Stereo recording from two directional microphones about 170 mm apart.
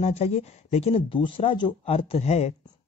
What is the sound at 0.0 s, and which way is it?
Speech, 40° left (ahead or behind).